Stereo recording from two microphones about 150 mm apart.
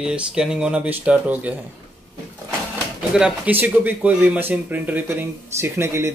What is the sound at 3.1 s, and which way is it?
Speech, 5° right (ahead or behind).